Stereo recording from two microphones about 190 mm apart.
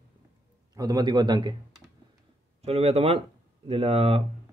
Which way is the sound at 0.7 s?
20° right (ahead or behind).